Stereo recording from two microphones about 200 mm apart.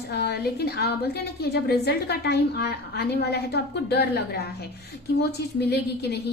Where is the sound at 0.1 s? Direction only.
55° left (ahead or behind).